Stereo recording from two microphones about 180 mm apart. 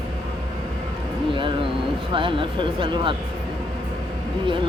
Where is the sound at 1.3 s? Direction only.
25° right (ahead or behind).